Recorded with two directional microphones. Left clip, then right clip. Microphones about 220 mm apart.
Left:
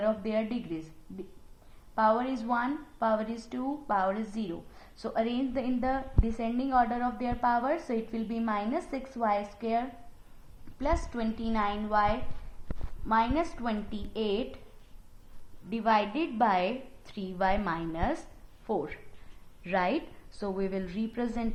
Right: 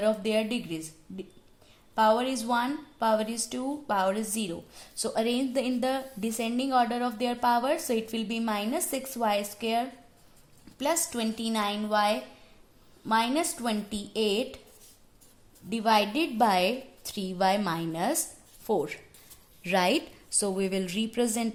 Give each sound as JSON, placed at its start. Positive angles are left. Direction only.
{"t": 0.0, "sound": "a woman's voice", "side_deg": -80}
{"t": 2.0, "sound": "a woman's voice", "side_deg": -75}
{"t": 5.6, "sound": "a woman's voice", "side_deg": -65}
{"t": 10.8, "sound": "a woman's voice", "side_deg": -75}
{"t": 15.7, "sound": "a woman's voice", "side_deg": -65}
{"t": 19.6, "sound": "a woman's voice", "side_deg": -90}
{"t": 20.4, "sound": "a woman's voice", "side_deg": -70}